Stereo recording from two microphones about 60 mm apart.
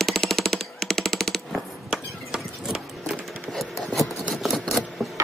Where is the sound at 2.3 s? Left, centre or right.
Centre.